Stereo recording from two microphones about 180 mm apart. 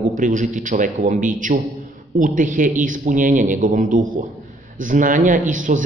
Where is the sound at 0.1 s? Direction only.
45° right (ahead or behind).